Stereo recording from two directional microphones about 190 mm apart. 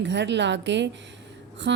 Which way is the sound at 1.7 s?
70° right (ahead or behind).